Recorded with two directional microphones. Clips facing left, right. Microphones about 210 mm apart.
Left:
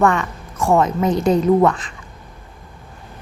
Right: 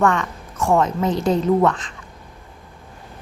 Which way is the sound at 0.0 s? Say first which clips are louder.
Left 2 dB; 5° left (ahead or behind).